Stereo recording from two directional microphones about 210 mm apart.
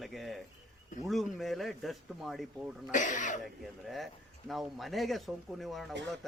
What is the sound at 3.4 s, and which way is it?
Speech, centre (ahead or behind).